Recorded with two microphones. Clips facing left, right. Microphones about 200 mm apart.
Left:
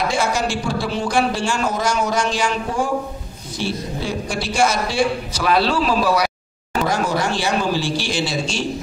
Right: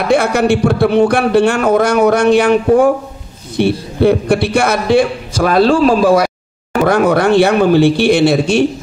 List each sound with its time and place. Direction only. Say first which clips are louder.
0.1 s a man's voice: right 10 dB; 60° right (ahead or behind)